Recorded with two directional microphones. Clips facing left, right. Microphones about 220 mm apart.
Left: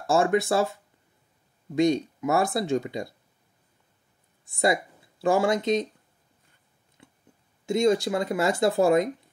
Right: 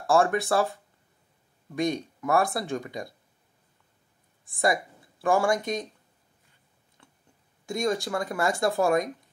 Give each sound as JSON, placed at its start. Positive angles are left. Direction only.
{"t": 0.0, "sound": "speech", "side_deg": 20}
{"t": 1.8, "sound": "speech", "side_deg": 20}
{"t": 5.2, "sound": "speech", "side_deg": 20}
{"t": 7.0, "sound": "a sound", "side_deg": 15}
{"t": 7.6, "sound": "speech", "side_deg": 25}